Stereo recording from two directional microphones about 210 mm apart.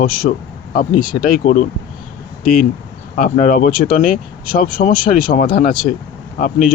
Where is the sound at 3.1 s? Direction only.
40° left (ahead or behind).